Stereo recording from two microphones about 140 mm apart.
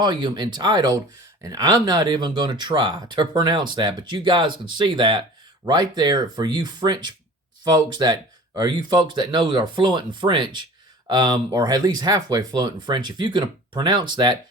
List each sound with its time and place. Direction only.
0.0 s speech: 35° right (ahead or behind)